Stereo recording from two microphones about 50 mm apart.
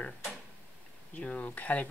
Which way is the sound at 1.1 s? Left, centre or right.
Left.